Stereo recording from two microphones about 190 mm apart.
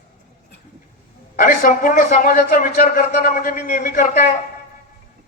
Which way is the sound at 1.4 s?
45° left (ahead or behind).